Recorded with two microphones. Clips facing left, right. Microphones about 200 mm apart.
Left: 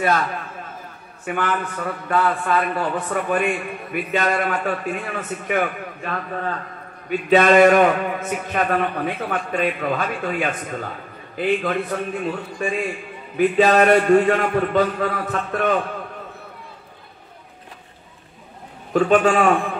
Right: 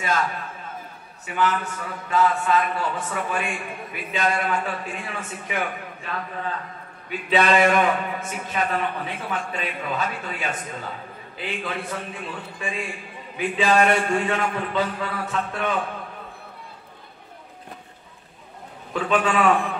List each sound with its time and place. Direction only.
1.2 s a man's voice: 55° left (ahead or behind)
18.9 s a man's voice: 45° left (ahead or behind)